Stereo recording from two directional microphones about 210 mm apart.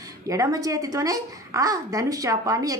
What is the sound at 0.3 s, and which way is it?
A woman's voice, 15° right (ahead or behind).